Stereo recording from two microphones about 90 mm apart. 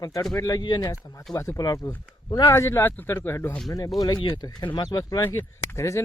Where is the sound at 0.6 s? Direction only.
55° left (ahead or behind).